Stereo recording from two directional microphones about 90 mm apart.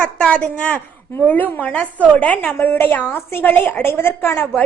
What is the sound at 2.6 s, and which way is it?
A woman's voice, 25° left (ahead or behind).